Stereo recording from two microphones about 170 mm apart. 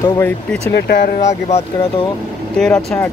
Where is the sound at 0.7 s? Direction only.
60° left (ahead or behind); by 1.6 s 40° left (ahead or behind).